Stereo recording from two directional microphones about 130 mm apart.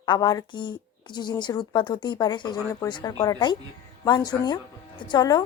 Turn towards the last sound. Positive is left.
turn(degrees=30)  # may be behind; listen again after turning